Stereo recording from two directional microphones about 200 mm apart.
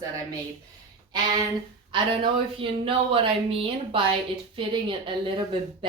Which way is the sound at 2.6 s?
25° right (ahead or behind).